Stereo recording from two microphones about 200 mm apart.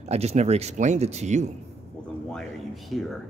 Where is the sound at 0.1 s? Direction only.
30° right (ahead or behind).